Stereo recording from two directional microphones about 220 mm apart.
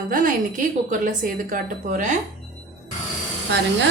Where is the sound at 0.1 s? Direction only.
40° right (ahead or behind).